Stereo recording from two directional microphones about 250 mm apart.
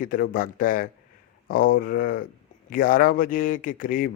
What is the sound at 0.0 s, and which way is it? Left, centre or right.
A man's voice, left.